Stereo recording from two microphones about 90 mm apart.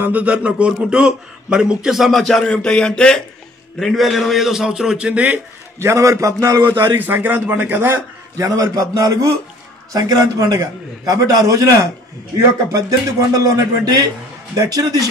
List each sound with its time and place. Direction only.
0.0 s a man's voice: 15° right (ahead or behind)
5.8 s a man's voice: 35° right (ahead or behind)
7.0 s speech: 20° right (ahead or behind)
8.4 s a man's voice: 40° right (ahead or behind)